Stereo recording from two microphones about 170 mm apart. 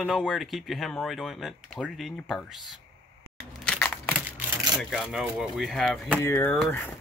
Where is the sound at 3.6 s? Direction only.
10° left (ahead or behind).